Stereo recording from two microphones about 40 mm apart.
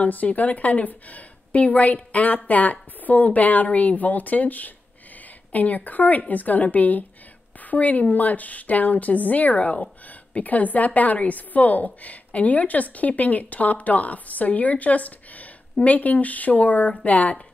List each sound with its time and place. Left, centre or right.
0.0 s a woman's voice: left